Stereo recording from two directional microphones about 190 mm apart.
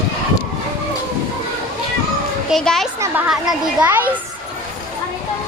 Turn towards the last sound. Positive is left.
turn(degrees=-10)  # may be behind; listen again after turning